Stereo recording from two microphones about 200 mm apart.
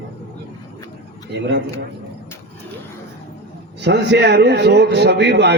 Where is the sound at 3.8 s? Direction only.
60° right (ahead or behind).